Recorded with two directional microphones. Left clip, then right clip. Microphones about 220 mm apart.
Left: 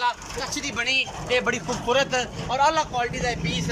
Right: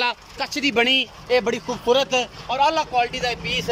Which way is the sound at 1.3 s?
20° right (ahead or behind).